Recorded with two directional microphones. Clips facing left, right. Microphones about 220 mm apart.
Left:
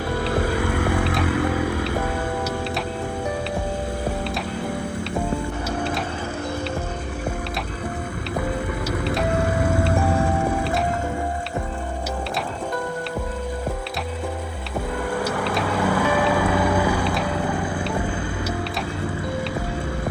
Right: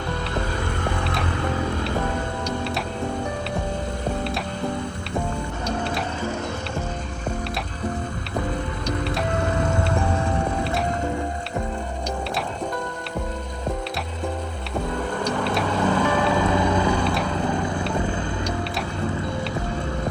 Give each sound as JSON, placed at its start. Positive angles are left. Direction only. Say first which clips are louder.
{"t": 1.6, "sound": "music", "louder": "left 1 dB", "side_deg": 10}
{"t": 15.2, "sound": "music", "louder": "right 2 dB", "side_deg": 5}
{"t": 17.5, "sound": "music", "louder": "even", "side_deg": -25}